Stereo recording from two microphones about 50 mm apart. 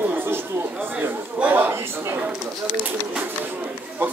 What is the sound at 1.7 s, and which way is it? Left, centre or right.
Speech, right.